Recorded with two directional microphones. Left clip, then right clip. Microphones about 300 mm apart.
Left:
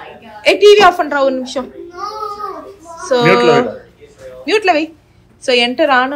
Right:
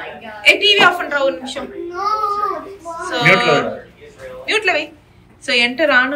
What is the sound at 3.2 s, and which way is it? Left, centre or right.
Speech, left.